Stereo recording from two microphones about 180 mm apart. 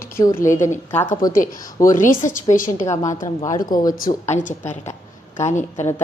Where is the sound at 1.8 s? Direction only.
50° left (ahead or behind).